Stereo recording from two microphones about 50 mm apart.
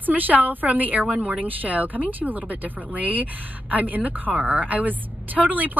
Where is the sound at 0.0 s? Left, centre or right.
Right.